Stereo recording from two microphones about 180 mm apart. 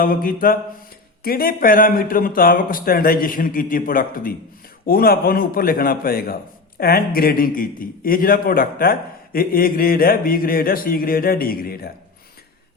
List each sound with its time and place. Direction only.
0.0 s a man's voice: 50° left (ahead or behind)